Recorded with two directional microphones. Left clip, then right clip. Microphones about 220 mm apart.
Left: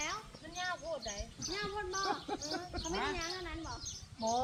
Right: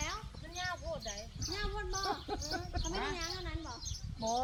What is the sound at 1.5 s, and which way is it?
Speech, 40° right (ahead or behind).